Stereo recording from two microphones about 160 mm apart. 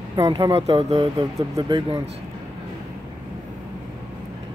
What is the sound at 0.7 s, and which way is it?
Speech, 40° right (ahead or behind).